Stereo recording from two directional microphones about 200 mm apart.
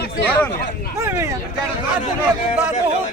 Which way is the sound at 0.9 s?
10° right (ahead or behind).